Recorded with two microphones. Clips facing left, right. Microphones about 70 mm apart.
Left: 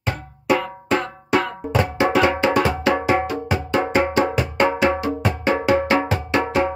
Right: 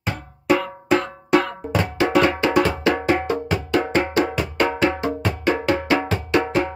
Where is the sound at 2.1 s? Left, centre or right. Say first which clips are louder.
Right 1 dB; centre.